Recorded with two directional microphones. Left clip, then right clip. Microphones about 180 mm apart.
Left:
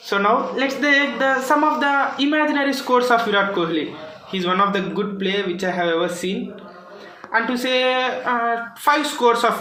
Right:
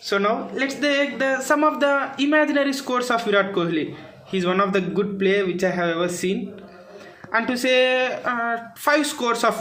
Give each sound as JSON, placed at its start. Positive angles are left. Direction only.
{"t": 0.6, "sound": "a man's voice", "side_deg": -45}
{"t": 7.3, "sound": "speech", "side_deg": -70}